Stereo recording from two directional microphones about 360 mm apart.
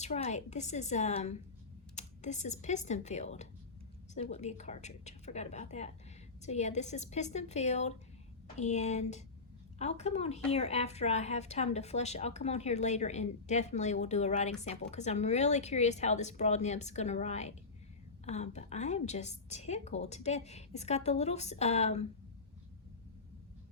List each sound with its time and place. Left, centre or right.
0.0 s a woman's voice: centre